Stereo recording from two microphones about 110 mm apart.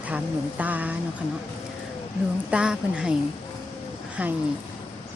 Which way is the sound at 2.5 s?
10° right (ahead or behind).